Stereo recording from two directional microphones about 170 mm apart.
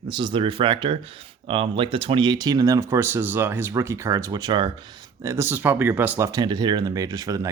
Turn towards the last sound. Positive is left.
turn(degrees=-20)  # may be behind; listen again after turning